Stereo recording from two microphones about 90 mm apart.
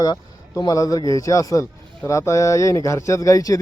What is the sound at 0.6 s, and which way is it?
A man's voice, 40° left (ahead or behind).